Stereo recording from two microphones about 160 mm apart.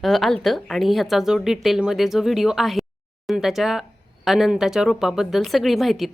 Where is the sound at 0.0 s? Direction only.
Centre (ahead or behind).